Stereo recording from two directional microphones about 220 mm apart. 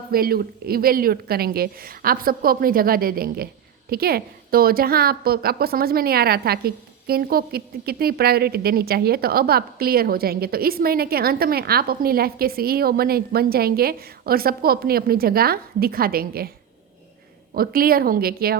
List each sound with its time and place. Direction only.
0.1 s a woman's voice: 40° right (ahead or behind)
17.5 s a woman's voice: 40° right (ahead or behind)